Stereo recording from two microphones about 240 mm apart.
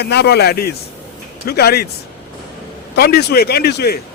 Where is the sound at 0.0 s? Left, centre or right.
Left.